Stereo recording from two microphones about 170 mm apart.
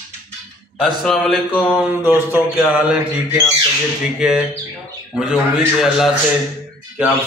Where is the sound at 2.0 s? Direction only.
10° right (ahead or behind).